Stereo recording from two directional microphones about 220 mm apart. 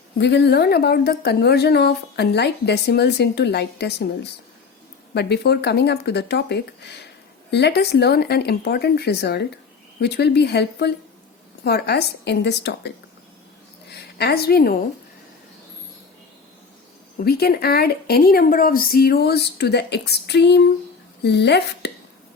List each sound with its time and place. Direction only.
0.2 s a woman's voice: 50° left (ahead or behind)
13.9 s a woman's voice: 45° left (ahead or behind)
17.2 s a woman's voice: 45° left (ahead or behind)